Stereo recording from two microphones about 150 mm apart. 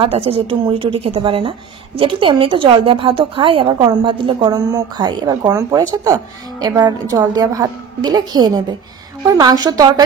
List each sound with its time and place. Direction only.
0.0 s a woman's voice: 40° right (ahead or behind)